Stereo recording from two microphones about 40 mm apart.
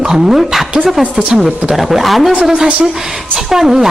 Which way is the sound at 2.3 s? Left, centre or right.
Right.